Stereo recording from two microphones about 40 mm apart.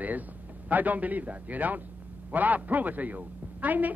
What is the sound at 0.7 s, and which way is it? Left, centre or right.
A woman's voice, right.